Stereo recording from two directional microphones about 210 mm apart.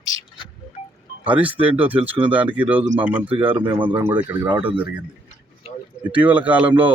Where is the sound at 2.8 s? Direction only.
35° right (ahead or behind).